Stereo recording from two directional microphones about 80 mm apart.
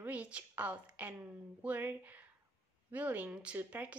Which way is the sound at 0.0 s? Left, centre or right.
Centre.